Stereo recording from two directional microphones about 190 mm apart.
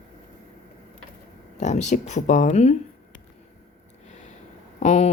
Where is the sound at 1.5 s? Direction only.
40° left (ahead or behind).